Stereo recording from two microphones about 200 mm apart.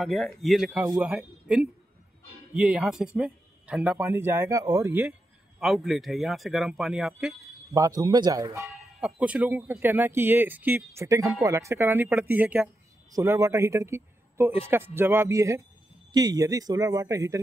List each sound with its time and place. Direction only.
0.0 s speech: centre (ahead or behind)
5.6 s speech: centre (ahead or behind)
7.7 s speech: 15° right (ahead or behind)
9.0 s speech: 5° right (ahead or behind)